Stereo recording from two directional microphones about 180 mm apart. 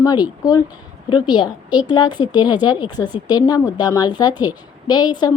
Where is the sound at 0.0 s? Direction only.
20° left (ahead or behind).